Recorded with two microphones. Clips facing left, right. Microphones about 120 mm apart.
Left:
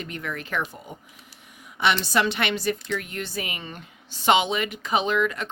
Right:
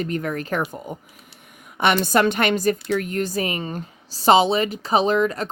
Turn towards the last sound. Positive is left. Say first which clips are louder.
# right 5 dB
turn(degrees=-35)  # may be behind; listen again after turning